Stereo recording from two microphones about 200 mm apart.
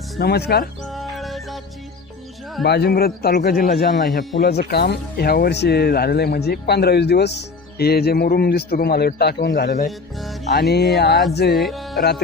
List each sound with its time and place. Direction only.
0.2 s speech: 55° left (ahead or behind)
0.9 s music: centre (ahead or behind)
2.6 s speech: 55° left (ahead or behind)
11.5 s speech: centre (ahead or behind)